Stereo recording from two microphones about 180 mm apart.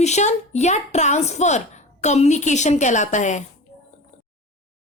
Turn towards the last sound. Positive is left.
turn(degrees=45)  # may be behind; listen again after turning